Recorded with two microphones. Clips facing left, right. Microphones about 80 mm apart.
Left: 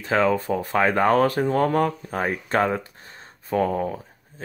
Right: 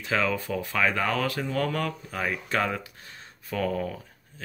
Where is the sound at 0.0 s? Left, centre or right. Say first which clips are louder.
Left 6 dB; left.